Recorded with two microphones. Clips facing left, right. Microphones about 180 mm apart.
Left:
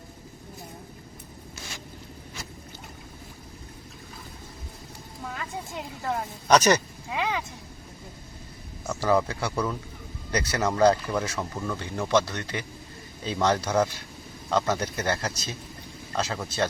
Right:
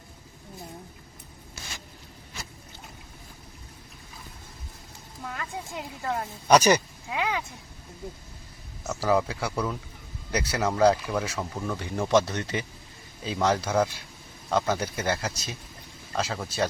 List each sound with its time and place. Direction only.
5.2 s a woman's voice: centre (ahead or behind)
6.5 s a sound: 10° right (ahead or behind)
8.8 s speech: 5° right (ahead or behind)
11.9 s speech: 20° right (ahead or behind)
13.2 s speech: 5° right (ahead or behind)